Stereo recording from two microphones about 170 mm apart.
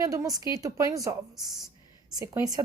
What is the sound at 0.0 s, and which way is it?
A woman's voice, 20° right (ahead or behind).